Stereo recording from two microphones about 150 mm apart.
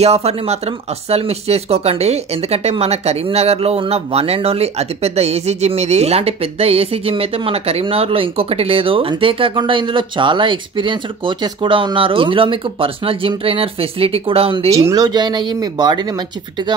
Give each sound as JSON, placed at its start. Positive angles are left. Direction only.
{"t": 0.0, "sound": "speech", "side_deg": -45}
{"t": 14.9, "sound": "speech", "side_deg": -25}